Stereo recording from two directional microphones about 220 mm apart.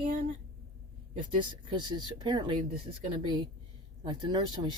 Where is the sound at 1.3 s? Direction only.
20° right (ahead or behind).